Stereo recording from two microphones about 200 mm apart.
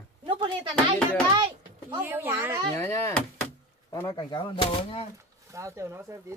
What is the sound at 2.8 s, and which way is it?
Speech, 15° left (ahead or behind).